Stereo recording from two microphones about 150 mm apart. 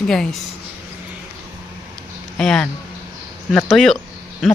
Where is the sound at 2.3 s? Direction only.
5° left (ahead or behind).